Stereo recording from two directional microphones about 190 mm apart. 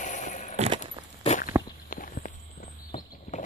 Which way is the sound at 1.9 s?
45° left (ahead or behind).